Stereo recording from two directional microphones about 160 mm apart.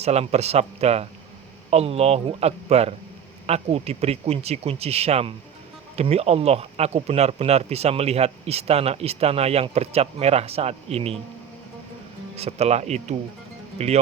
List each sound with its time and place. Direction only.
0.0 s speech: 40° right (ahead or behind)
12.4 s speech: 40° right (ahead or behind)